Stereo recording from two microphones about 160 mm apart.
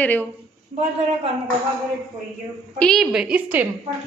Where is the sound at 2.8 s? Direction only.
Centre (ahead or behind).